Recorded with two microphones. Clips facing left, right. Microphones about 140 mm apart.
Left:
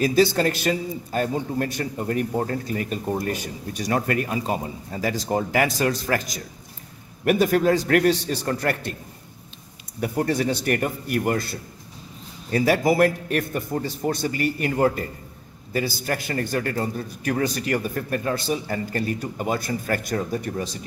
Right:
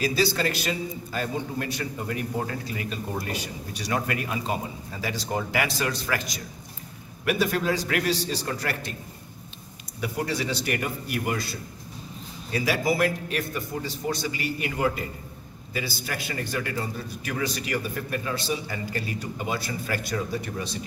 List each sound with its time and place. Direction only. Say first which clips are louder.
0.0 s a man's voice: left 6 dB; 50° left (ahead or behind)
9.9 s a man's voice: left 5 dB; 50° left (ahead or behind)